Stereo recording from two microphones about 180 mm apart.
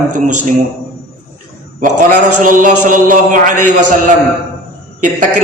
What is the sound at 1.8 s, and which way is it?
A man's voice, 50° right (ahead or behind).